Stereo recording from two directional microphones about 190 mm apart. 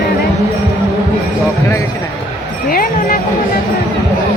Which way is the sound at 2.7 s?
50° left (ahead or behind).